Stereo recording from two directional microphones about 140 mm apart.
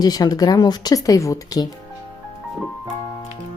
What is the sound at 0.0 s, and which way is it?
Speech, 25° left (ahead or behind).